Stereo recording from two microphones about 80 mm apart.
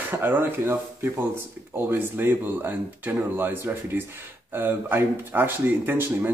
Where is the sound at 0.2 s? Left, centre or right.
Right.